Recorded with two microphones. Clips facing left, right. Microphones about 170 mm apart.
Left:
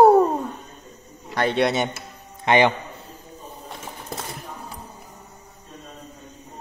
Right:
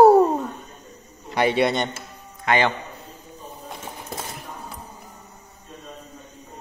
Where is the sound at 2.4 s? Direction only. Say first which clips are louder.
Left 3 dB; 20° left (ahead or behind).